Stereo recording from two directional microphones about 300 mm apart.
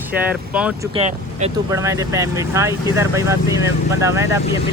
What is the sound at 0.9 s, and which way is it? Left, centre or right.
Speech, centre.